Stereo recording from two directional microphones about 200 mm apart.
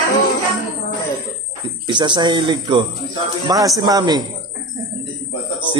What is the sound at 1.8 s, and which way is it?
Mantra, 25° right (ahead or behind).